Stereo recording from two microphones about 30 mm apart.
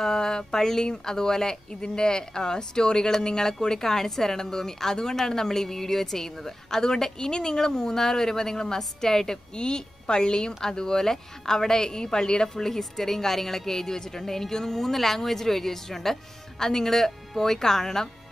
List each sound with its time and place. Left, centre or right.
0.0 s a woman's voice: centre
12.6 s a woman's voice: centre